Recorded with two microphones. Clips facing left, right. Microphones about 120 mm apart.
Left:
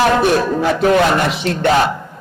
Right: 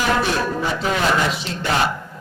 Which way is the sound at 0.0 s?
55° left (ahead or behind).